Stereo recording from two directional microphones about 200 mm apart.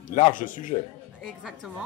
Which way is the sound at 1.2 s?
Centre (ahead or behind).